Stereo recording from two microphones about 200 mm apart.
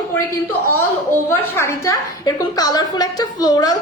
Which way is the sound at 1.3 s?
15° left (ahead or behind).